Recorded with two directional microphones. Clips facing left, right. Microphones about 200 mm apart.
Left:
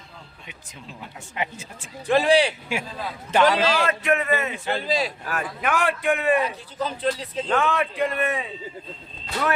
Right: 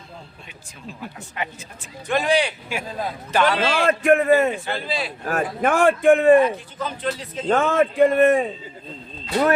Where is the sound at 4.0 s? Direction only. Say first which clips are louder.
Right 7 dB; 50° right (ahead or behind).